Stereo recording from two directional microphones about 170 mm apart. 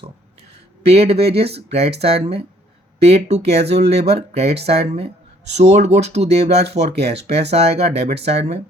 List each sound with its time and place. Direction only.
0.9 s speech: 35° right (ahead or behind)